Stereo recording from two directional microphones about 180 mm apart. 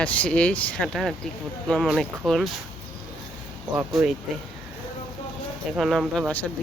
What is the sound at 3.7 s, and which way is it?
Speech, 5° right (ahead or behind).